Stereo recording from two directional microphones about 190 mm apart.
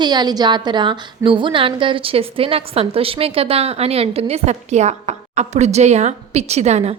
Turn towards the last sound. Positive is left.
turn(degrees=-35)  # may be behind; listen again after turning